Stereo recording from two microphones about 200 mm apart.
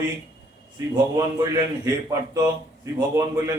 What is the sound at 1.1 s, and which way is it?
A man's voice, 15° right (ahead or behind).